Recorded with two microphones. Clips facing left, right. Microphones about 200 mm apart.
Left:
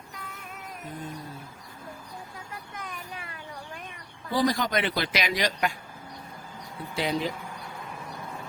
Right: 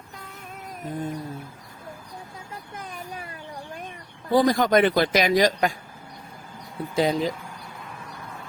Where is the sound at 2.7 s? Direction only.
35° right (ahead or behind).